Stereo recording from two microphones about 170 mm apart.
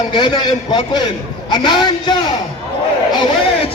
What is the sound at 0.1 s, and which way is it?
A man's voice, 30° left (ahead or behind).